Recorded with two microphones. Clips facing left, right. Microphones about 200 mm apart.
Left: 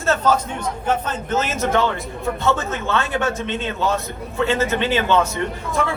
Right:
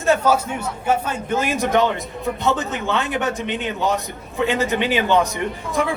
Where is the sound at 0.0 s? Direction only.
10° right (ahead or behind).